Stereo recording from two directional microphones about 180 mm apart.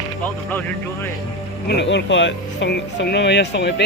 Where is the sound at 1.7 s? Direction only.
75° left (ahead or behind).